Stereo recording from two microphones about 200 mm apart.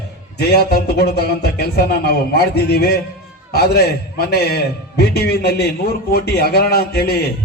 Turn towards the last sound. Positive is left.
turn(degrees=50)  # may be behind; listen again after turning